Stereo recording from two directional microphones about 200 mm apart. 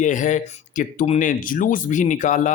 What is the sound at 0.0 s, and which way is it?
Speech, 40° left (ahead or behind).